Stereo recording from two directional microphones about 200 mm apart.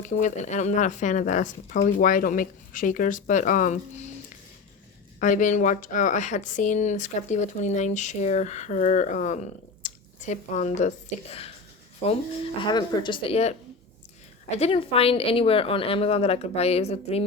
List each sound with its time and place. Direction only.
0.0 s speech: 40° left (ahead or behind)
5.2 s a woman's voice: 40° left (ahead or behind)
14.6 s a woman's voice: 30° left (ahead or behind)